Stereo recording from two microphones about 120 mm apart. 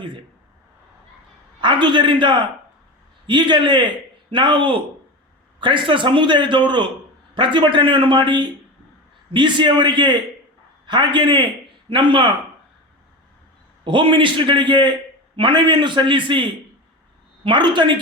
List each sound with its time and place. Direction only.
1.6 s a man's voice: 40° right (ahead or behind)
13.8 s a man's voice: 40° right (ahead or behind)